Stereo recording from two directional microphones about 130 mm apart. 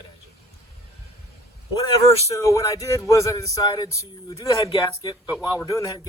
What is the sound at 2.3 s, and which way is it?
Speech, 25° left (ahead or behind).